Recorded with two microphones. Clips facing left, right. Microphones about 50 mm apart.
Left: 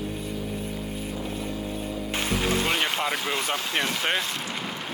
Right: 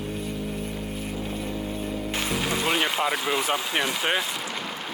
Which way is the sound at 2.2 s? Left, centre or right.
Centre.